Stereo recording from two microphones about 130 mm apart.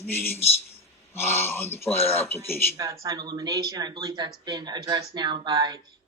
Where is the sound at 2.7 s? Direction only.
25° right (ahead or behind).